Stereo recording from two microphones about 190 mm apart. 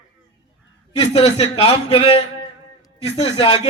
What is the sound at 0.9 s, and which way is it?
A man's voice, 25° left (ahead or behind).